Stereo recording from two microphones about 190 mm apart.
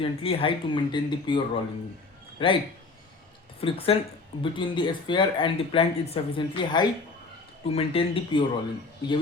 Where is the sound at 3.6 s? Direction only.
30° left (ahead or behind).